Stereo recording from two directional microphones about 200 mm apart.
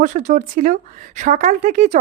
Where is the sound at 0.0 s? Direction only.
40° right (ahead or behind).